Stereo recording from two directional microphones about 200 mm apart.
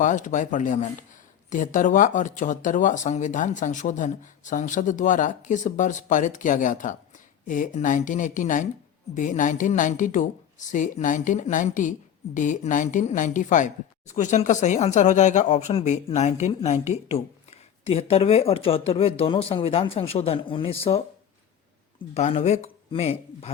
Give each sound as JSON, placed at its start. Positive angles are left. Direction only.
{"t": 0.0, "sound": "speech", "side_deg": 40}
{"t": 22.1, "sound": "speech", "side_deg": 30}